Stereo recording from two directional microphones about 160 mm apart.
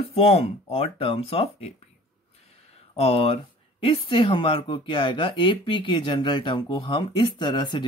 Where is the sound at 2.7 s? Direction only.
35° left (ahead or behind).